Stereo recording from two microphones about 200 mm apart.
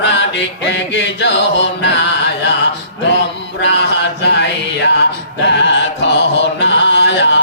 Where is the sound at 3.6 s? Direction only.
60° left (ahead or behind).